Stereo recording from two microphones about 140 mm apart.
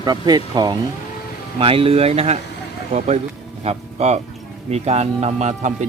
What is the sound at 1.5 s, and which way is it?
Speech, 40° right (ahead or behind).